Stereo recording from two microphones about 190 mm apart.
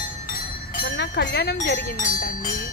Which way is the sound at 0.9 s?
65° left (ahead or behind).